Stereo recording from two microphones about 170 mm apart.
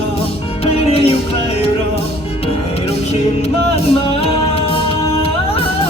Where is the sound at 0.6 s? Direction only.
35° left (ahead or behind).